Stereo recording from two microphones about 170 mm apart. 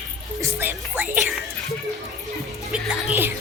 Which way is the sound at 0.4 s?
10° right (ahead or behind).